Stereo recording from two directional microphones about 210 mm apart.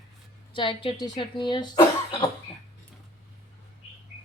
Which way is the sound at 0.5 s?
25° left (ahead or behind).